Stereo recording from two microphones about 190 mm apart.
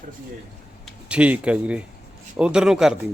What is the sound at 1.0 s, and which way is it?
A man's voice, 5° right (ahead or behind).